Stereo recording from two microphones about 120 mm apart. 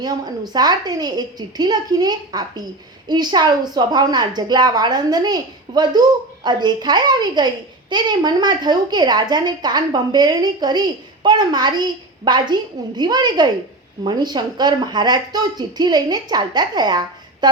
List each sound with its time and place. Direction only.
0.0 s a woman's voice: 35° right (ahead or behind)